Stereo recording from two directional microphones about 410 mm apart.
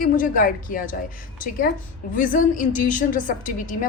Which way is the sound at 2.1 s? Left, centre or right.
Centre.